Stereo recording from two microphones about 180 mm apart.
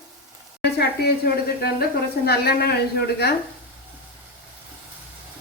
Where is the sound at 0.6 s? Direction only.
65° left (ahead or behind).